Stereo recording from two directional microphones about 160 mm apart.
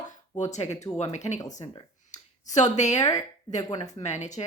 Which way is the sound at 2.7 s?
45° left (ahead or behind).